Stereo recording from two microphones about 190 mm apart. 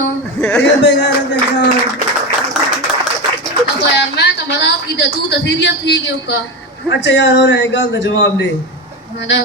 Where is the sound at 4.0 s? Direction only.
65° left (ahead or behind).